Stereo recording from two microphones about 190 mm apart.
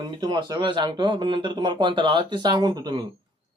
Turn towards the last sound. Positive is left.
turn(degrees=-20)  # may be behind; listen again after turning